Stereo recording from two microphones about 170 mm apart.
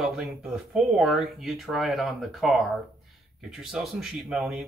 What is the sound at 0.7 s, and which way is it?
Speech, centre (ahead or behind).